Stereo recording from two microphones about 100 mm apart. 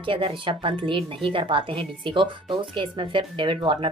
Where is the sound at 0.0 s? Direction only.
60° right (ahead or behind).